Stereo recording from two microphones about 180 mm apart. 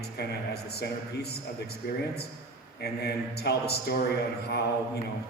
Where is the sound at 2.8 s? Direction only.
65° left (ahead or behind).